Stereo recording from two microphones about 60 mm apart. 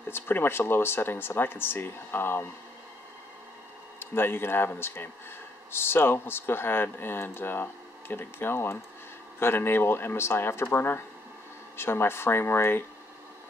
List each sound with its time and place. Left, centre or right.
0.1 s speech: left
4.0 s speech: left